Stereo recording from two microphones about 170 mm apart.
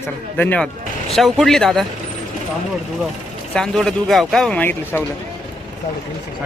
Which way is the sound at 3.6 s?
5° left (ahead or behind).